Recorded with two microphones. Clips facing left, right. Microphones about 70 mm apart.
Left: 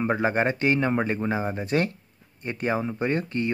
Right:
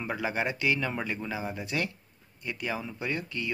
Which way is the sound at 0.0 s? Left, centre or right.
Left.